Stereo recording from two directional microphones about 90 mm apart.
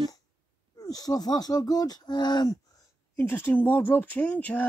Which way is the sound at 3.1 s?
20° left (ahead or behind).